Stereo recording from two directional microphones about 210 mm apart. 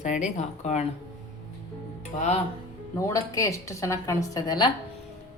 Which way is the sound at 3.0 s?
15° left (ahead or behind).